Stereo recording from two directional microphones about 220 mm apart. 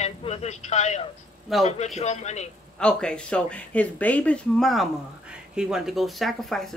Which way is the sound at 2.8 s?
5° left (ahead or behind).